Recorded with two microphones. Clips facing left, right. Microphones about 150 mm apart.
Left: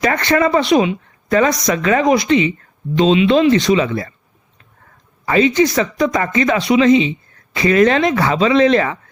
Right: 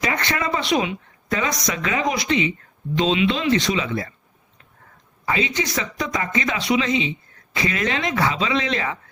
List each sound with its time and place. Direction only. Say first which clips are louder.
0.0 s speech: left 9 dB; 50° left (ahead or behind)
5.2 s speech: left 10 dB; 50° left (ahead or behind)